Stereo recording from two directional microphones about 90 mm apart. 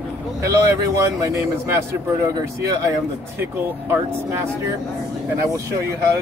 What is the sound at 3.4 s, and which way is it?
A man's voice, 25° right (ahead or behind).